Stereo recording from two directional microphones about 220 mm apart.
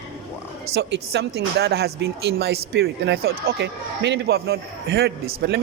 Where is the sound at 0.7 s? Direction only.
50° right (ahead or behind).